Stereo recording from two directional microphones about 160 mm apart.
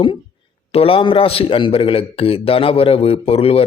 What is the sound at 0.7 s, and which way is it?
A man's voice, 35° left (ahead or behind).